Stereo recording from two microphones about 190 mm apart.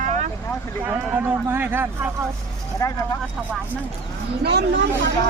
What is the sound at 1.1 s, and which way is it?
Speech, 10° right (ahead or behind).